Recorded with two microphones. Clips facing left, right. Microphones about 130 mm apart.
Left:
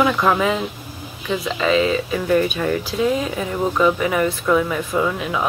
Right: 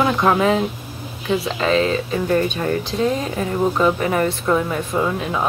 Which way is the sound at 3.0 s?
40° right (ahead or behind).